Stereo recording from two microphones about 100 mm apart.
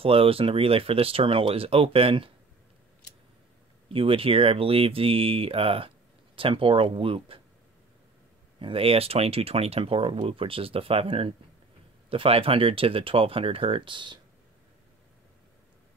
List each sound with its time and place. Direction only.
0.0 s speech: 70° right (ahead or behind)
3.9 s speech: 65° right (ahead or behind)
8.5 s speech: 65° right (ahead or behind)